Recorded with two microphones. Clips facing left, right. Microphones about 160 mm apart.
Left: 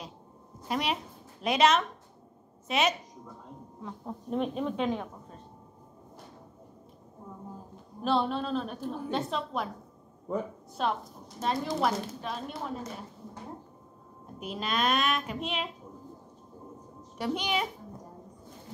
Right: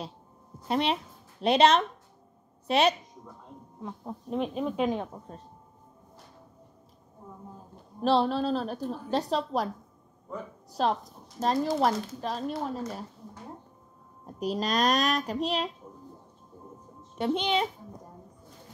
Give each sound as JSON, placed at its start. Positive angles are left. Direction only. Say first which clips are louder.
{"t": 0.7, "sound": "a child's voice", "louder": "right 4 dB", "side_deg": -30}
{"t": 3.8, "sound": "speech", "louder": "right 1 dB", "side_deg": -5}
{"t": 8.0, "sound": "speech", "louder": "right 4 dB", "side_deg": -35}
{"t": 10.7, "sound": "speech", "louder": "right 4 dB", "side_deg": -35}
{"t": 14.4, "sound": "speech", "louder": "right 4 dB", "side_deg": -40}
{"t": 17.2, "sound": "a child's voice", "louder": "right 4 dB", "side_deg": -25}